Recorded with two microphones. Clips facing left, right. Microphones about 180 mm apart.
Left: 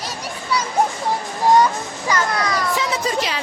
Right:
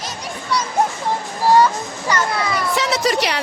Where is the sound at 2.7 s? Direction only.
80° right.